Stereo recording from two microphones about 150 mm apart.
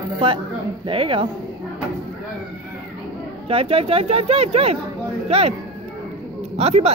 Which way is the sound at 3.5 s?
40° right (ahead or behind).